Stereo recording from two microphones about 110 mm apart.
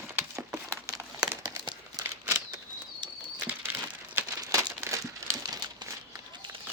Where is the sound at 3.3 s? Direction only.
20° right (ahead or behind).